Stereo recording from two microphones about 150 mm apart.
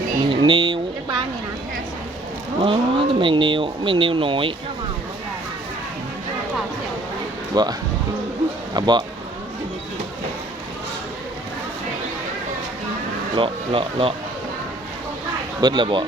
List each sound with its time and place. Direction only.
0.3 s a sound: 30° right (ahead or behind)
2.6 s speech: 35° right (ahead or behind)
7.5 s speech: 30° right (ahead or behind)
13.3 s speech: 35° right (ahead or behind)
15.6 s speech: 30° right (ahead or behind)